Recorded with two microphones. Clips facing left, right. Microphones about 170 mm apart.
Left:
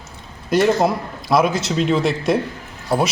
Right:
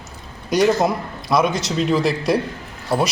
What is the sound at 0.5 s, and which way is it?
A man's voice, centre (ahead or behind).